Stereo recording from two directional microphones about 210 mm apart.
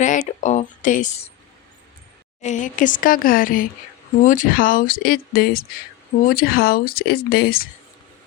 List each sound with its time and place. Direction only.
0.0 s speech: 35° left (ahead or behind)
2.4 s a woman's voice: 35° left (ahead or behind)